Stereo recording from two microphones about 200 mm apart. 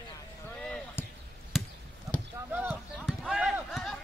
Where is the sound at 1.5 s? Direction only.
Centre (ahead or behind).